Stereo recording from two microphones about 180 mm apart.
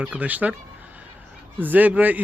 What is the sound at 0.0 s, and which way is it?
Speech, 5° right (ahead or behind).